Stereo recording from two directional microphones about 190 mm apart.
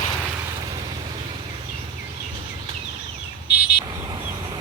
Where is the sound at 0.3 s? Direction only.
20° right (ahead or behind).